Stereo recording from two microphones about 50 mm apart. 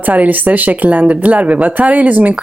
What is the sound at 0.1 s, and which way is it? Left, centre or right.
Speech, right.